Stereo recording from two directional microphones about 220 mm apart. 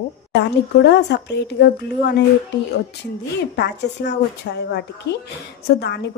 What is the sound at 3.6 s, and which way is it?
Speech, 50° left (ahead or behind).